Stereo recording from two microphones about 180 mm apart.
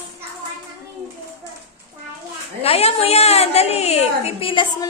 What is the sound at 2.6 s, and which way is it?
A woman's voice, 35° left (ahead or behind).